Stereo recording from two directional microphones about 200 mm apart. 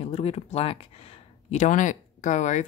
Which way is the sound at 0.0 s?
30° left (ahead or behind).